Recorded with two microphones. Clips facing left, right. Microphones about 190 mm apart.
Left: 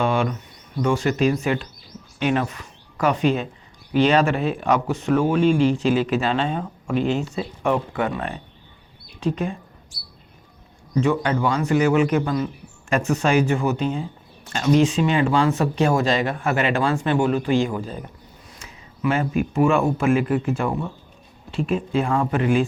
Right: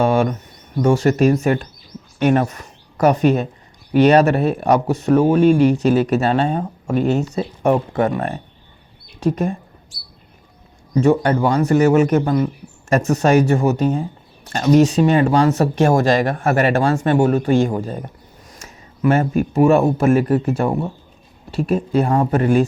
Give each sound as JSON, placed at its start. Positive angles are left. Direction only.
{"t": 0.0, "sound": "speech", "side_deg": -45}
{"t": 11.0, "sound": "speech", "side_deg": -45}